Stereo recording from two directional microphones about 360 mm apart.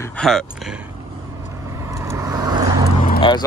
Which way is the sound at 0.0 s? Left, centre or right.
Centre.